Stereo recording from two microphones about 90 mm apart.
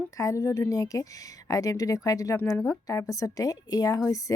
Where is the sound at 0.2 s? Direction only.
40° left (ahead or behind).